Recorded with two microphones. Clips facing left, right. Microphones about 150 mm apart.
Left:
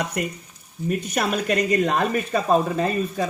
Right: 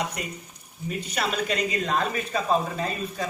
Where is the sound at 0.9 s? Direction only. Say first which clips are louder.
Left 5 dB; 50° left (ahead or behind).